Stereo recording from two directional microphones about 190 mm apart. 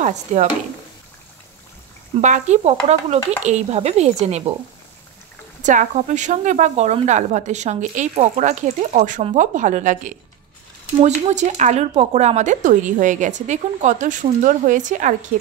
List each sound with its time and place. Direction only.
0.0 s speech: 40° right (ahead or behind)
2.1 s speech: 40° right (ahead or behind)
5.6 s speech: 40° right (ahead or behind)